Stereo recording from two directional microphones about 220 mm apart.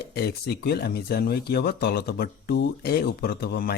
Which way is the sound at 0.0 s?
45° left (ahead or behind).